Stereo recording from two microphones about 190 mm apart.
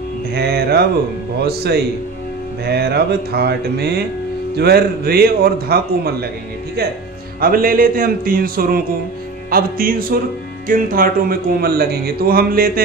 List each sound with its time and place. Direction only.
0.3 s mantra: 55° right (ahead or behind)
1.4 s speech: 55° right (ahead or behind)
7.3 s speech: 50° right (ahead or behind)